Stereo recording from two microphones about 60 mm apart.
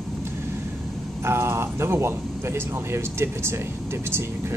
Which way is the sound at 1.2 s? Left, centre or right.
Right.